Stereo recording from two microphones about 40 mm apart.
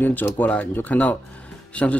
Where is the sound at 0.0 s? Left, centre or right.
Left.